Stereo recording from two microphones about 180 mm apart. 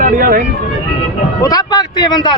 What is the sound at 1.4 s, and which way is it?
Speech, 20° left (ahead or behind).